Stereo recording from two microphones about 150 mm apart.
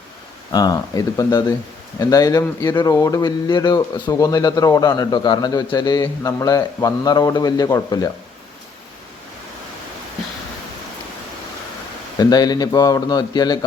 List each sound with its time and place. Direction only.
0.5 s speech: 25° left (ahead or behind)
12.1 s speech: 25° left (ahead or behind)